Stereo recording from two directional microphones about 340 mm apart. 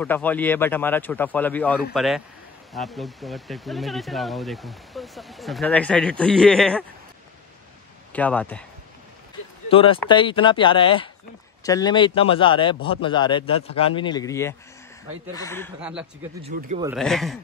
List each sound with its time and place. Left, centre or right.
0.0 s speech: centre
8.1 s speech: centre
9.7 s speech: centre
15.8 s speech: centre
16.5 s a man's voice: right
16.9 s speech: centre